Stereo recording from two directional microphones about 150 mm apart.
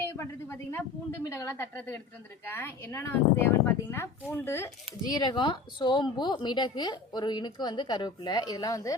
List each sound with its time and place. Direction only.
0.0 s a sound: 15° left (ahead or behind)
1.2 s a woman's voice: 20° left (ahead or behind)
5.1 s a woman's voice: 30° left (ahead or behind)